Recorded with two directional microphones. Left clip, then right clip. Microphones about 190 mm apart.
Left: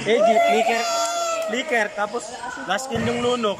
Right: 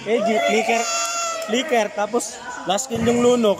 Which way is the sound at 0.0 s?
10° right (ahead or behind).